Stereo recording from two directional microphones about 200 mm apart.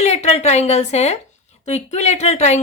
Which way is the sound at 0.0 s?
35° left (ahead or behind).